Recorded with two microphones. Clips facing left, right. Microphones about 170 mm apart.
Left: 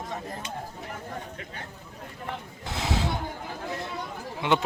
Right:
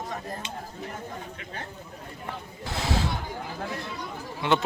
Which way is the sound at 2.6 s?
20° left (ahead or behind).